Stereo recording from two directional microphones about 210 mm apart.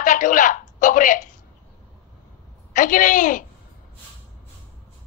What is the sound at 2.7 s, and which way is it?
Speech, 40° left (ahead or behind).